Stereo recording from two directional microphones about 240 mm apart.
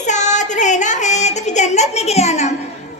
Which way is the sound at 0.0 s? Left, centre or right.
Left.